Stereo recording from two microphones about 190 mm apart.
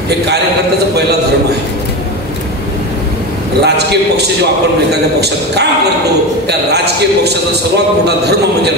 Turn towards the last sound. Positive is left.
turn(degrees=-60)  # may be behind; listen again after turning